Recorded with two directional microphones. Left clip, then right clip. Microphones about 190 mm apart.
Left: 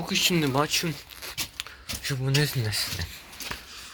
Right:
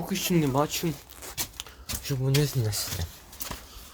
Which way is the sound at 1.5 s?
20° right (ahead or behind).